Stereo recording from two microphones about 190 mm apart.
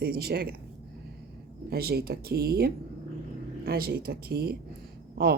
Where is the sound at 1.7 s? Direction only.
55° right (ahead or behind).